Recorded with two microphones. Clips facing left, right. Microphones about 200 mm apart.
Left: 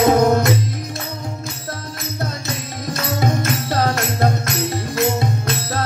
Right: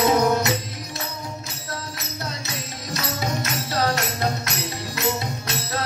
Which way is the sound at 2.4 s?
50° left (ahead or behind).